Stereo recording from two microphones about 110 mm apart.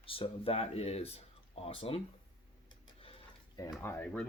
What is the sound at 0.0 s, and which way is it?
Speech, 55° left (ahead or behind).